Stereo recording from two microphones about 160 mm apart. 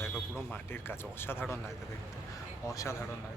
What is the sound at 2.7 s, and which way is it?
Speech, 20° left (ahead or behind).